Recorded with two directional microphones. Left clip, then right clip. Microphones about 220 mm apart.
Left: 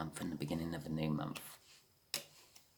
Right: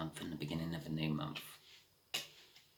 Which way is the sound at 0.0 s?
50° left (ahead or behind).